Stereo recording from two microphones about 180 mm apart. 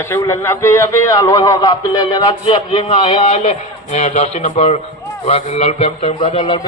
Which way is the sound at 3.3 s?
40° left (ahead or behind).